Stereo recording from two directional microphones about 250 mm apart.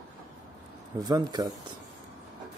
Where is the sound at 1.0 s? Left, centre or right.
Centre.